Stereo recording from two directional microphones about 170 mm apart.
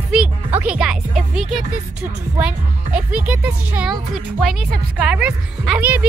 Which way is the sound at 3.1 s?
10° right (ahead or behind).